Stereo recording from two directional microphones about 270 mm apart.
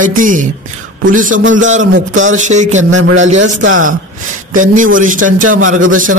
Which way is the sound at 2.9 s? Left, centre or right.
Right.